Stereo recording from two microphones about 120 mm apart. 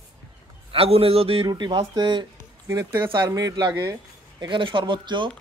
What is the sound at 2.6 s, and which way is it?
Speech, 25° right (ahead or behind).